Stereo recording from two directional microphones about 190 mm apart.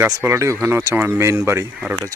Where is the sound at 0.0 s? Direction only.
10° right (ahead or behind).